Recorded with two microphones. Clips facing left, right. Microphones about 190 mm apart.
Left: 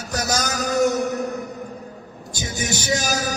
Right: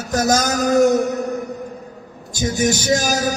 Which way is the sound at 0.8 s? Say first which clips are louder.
Right 5 dB; centre (ahead or behind).